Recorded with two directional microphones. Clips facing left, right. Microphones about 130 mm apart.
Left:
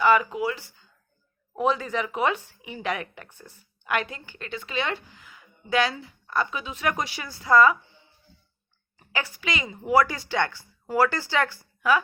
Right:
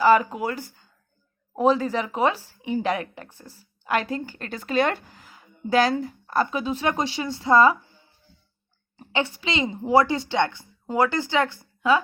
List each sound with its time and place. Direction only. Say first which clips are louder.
0.0 s speech: right 2 dB; 40° right (ahead or behind)
9.0 s speech: right 6 dB; 30° right (ahead or behind)